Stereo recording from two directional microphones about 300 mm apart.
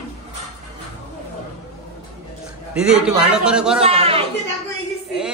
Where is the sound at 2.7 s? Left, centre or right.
Centre.